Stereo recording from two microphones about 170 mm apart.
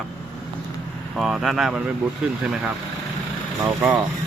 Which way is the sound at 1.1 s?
Centre (ahead or behind).